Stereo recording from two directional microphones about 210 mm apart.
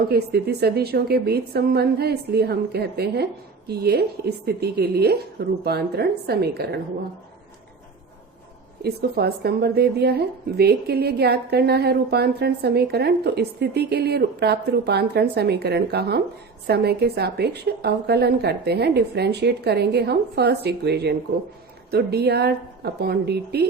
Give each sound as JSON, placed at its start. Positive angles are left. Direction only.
{"t": 0.1, "sound": "a woman's voice", "side_deg": -50}
{"t": 8.8, "sound": "a woman's voice", "side_deg": -50}